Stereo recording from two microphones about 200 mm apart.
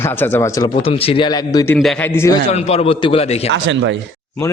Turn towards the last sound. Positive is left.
turn(degrees=-65)  # may be behind; listen again after turning